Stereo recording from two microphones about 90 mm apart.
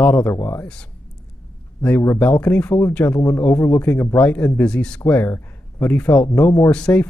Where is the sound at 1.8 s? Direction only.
25° left (ahead or behind).